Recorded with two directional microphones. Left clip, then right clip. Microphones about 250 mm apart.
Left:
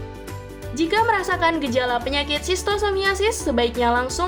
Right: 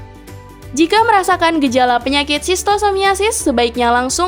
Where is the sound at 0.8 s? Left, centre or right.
Right.